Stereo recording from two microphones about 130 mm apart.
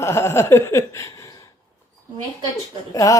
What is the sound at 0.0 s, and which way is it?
Speech, 20° left (ahead or behind).